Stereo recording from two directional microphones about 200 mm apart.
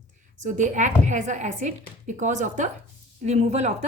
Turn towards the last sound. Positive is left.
turn(degrees=-35)  # may be behind; listen again after turning